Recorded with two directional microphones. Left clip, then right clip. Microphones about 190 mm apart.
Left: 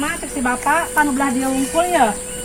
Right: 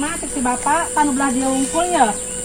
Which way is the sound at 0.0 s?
10° left (ahead or behind).